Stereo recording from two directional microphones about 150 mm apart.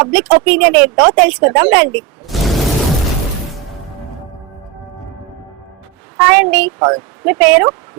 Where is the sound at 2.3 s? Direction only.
Centre (ahead or behind).